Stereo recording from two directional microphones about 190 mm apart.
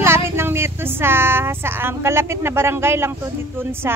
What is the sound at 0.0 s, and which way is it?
Speech, 10° right (ahead or behind).